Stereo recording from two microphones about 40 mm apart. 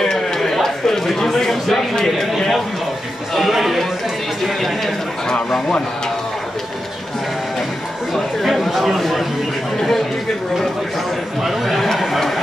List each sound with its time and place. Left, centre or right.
0.0 s a sound: centre
3.3 s speech: centre
5.3 s speech: left
8.1 s speech: centre
11.4 s speech: centre